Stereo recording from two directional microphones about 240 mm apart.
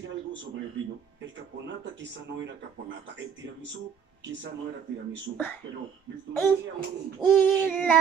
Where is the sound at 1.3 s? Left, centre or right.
Right.